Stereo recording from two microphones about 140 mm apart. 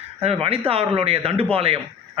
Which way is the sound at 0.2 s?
45° right (ahead or behind).